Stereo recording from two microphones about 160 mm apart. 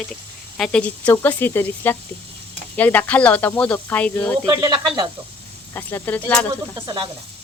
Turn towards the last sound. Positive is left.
turn(degrees=-25)  # may be behind; listen again after turning